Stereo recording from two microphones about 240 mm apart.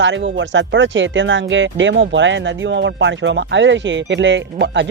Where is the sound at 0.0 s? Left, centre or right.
Right.